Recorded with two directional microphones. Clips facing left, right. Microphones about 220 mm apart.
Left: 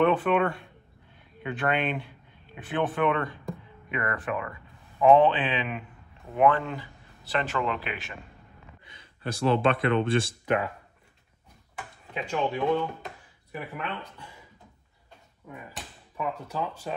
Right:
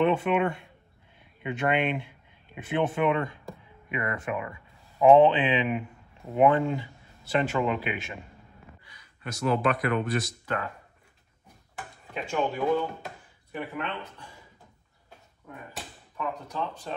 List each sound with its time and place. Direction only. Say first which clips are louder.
0.0 s speech: left 1 dB; 15° right (ahead or behind)
8.8 s speech: left 5 dB; 30° left (ahead or behind)
12.1 s speech: even; 5° right (ahead or behind)
16.4 s speech: left 1 dB; 10° left (ahead or behind)